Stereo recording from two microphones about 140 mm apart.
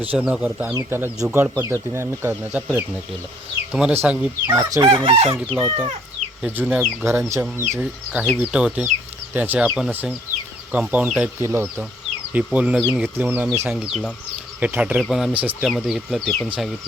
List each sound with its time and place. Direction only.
0.0 s speech: 5° right (ahead or behind)
0.7 s speech: 20° right (ahead or behind)
3.7 s speech: 5° right (ahead or behind)
4.0 s chicken: 10° right (ahead or behind)
4.9 s chicken: 40° right (ahead or behind)
6.4 s speech: 10° right (ahead or behind)
11.3 s chicken: 20° right (ahead or behind)
12.3 s speech: 10° right (ahead or behind)
13.7 s speech: 5° right (ahead or behind)